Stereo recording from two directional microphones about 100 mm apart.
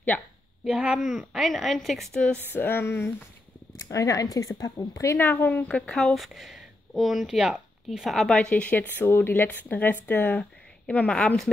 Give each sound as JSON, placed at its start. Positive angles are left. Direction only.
{"t": 0.7, "sound": "a woman's voice", "side_deg": -10}
{"t": 2.5, "sound": "a sound", "side_deg": 20}
{"t": 3.7, "sound": "speech", "side_deg": 35}
{"t": 5.2, "sound": "a woman's voice", "side_deg": 20}